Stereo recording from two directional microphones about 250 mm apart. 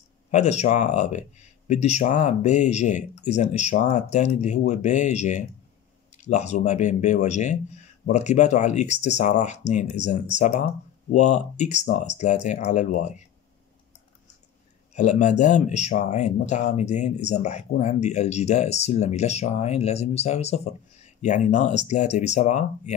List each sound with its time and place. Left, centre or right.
0.3 s speech: left
15.0 s speech: left